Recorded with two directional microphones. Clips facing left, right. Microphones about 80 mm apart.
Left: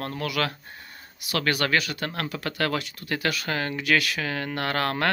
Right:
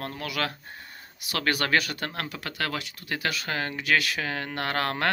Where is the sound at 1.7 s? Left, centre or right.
Right.